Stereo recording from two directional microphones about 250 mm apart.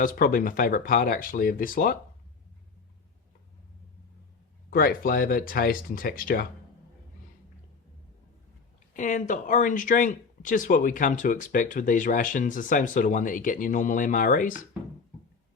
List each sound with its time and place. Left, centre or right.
0.0 s speech: left
4.7 s speech: left
8.9 s speech: left